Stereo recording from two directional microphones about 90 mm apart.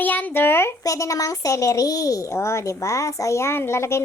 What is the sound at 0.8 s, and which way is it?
A woman's voice, 40° left (ahead or behind).